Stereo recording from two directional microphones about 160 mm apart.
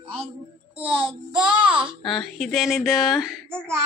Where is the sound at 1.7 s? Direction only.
5° right (ahead or behind).